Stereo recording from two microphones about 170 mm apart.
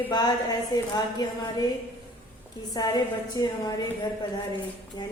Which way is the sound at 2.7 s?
25° left (ahead or behind).